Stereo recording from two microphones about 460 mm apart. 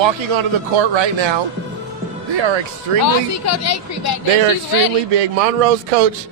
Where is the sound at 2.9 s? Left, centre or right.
Right.